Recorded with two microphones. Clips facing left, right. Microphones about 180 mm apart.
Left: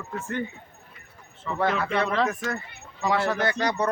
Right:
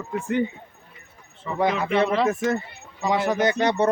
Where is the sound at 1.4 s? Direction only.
15° right (ahead or behind).